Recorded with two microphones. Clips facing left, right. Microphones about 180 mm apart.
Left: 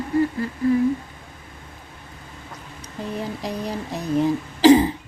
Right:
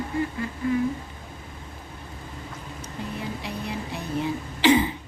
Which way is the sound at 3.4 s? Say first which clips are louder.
Left 4 dB; 40° left (ahead or behind).